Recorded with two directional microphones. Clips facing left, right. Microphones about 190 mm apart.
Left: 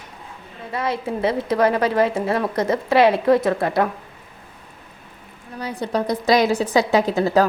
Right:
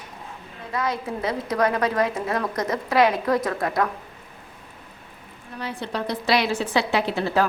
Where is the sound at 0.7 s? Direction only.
30° left (ahead or behind).